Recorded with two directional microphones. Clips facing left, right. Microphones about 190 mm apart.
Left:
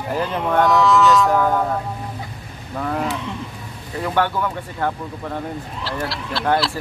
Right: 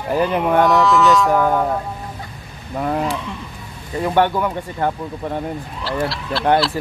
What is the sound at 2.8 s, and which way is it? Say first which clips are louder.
Speech: right 2 dB; 20° right (ahead or behind).